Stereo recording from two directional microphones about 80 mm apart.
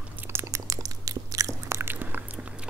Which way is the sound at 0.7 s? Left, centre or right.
Right.